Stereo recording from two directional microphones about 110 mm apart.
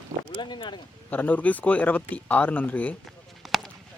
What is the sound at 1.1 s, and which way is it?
Speech, 15° left (ahead or behind).